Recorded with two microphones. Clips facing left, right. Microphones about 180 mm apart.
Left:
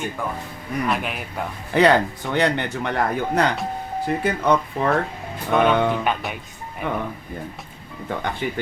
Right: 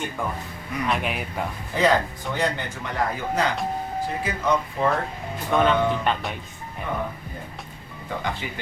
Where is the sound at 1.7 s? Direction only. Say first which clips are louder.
Left 5 dB; 70° left (ahead or behind).